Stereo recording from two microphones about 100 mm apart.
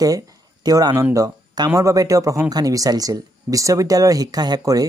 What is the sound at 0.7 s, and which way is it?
Speech, 40° right (ahead or behind).